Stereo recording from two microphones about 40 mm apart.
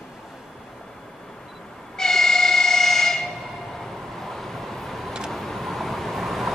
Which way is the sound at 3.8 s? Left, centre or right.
Centre.